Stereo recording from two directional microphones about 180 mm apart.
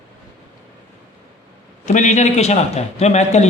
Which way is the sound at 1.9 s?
40° left (ahead or behind).